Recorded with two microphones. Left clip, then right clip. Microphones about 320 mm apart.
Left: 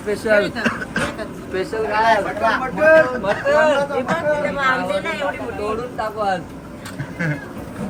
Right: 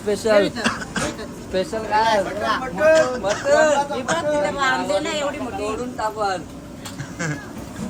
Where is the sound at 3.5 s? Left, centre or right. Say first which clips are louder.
Left 1 dB; right.